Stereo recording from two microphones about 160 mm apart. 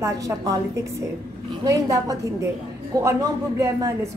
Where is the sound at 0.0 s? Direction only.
20° right (ahead or behind).